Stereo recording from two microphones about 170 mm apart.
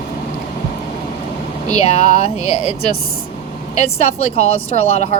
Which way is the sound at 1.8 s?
40° left (ahead or behind).